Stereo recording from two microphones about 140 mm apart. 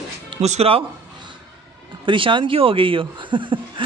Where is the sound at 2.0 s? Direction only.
35° right (ahead or behind).